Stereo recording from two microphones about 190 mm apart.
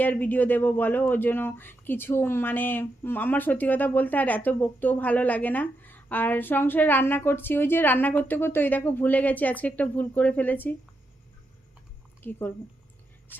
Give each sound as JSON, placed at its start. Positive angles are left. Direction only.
{"t": 0.0, "sound": "speech", "side_deg": 10}
{"t": 12.2, "sound": "speech", "side_deg": 10}